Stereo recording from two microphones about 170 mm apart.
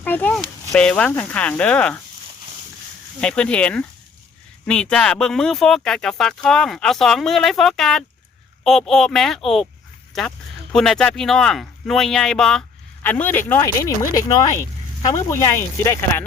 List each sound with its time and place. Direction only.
0.0 s speech: 10° left (ahead or behind)
3.2 s speech: 5° left (ahead or behind)